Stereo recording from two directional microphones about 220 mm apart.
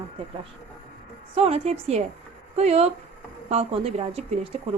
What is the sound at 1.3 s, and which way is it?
A woman's voice, 25° right (ahead or behind).